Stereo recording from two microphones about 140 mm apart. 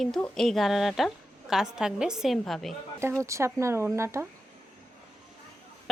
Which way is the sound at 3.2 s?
20° right (ahead or behind).